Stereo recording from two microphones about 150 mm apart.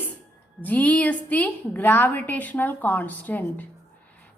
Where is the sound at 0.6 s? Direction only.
10° left (ahead or behind).